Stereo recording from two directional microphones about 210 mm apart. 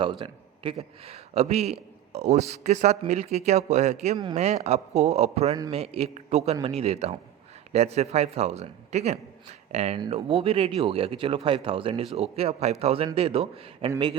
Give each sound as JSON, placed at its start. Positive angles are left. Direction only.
{"t": 0.0, "sound": "speech", "side_deg": -25}